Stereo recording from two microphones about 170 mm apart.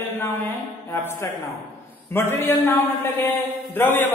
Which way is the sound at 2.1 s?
15° left (ahead or behind).